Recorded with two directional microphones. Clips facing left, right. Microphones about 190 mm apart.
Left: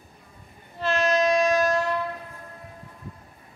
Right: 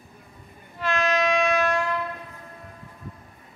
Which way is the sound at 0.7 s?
35° left (ahead or behind).